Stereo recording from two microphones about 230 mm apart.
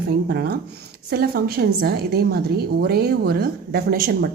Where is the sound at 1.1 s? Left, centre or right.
Right.